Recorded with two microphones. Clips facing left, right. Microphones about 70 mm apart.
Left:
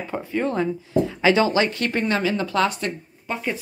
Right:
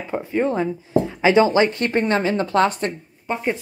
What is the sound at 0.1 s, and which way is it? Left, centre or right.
Speech, centre.